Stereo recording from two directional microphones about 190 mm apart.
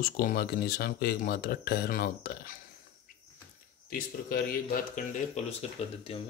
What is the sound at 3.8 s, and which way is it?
Speech, 50° left (ahead or behind).